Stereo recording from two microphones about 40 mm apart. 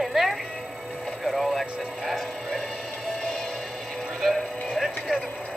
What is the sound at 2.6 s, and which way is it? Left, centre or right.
Music, centre.